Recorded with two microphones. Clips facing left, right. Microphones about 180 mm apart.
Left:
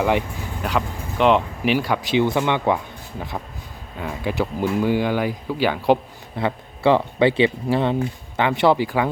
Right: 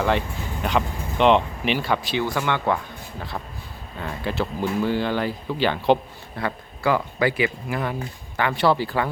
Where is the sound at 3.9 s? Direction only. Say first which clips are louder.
Left 3 dB; 10° left (ahead or behind).